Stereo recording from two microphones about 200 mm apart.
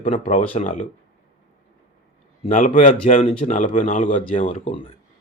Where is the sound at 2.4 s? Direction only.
40° left (ahead or behind).